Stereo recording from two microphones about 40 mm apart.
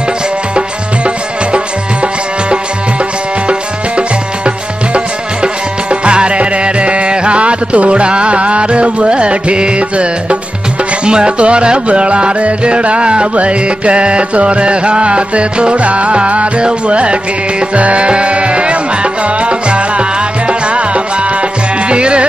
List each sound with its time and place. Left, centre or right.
0.6 s music: right
4.9 s music: right
11.1 s music: right